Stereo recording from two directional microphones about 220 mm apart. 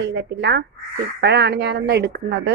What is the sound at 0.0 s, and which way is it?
A woman's voice, 50° right (ahead or behind).